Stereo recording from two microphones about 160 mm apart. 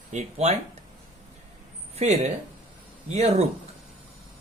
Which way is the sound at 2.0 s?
45° right (ahead or behind).